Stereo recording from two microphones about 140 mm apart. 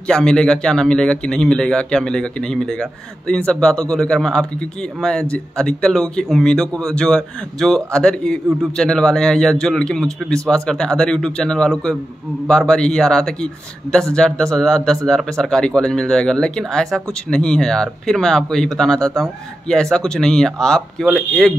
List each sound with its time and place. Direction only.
0.1 s speech: 5° left (ahead or behind)